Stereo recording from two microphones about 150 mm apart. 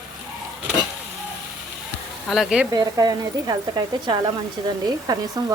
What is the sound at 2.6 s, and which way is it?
Speech, 25° right (ahead or behind).